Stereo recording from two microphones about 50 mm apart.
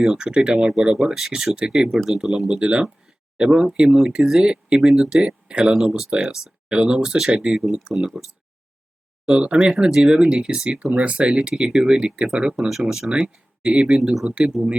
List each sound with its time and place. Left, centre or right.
0.0 s speech: centre
0.9 s speech: centre
6.7 s speech: centre
9.2 s speech: centre
13.6 s speech: right